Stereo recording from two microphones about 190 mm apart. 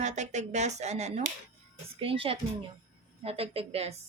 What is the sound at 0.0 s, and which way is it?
A woman's voice, 40° right (ahead or behind).